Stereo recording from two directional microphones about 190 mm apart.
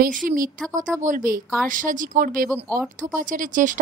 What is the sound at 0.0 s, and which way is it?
A woman's voice, 45° right (ahead or behind).